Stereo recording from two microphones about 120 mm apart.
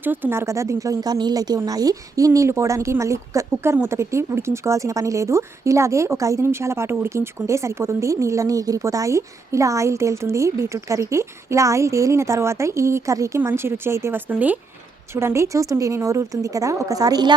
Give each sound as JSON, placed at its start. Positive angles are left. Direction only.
{"t": 0.0, "sound": "speech", "side_deg": -15}